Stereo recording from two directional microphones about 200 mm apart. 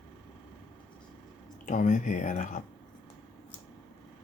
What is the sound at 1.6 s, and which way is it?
Speech, 40° left (ahead or behind).